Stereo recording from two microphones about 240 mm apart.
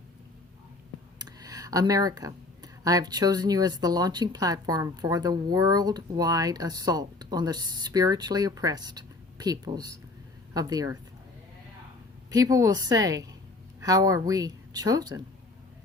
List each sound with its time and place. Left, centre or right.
1.2 s speech: centre
12.3 s speech: centre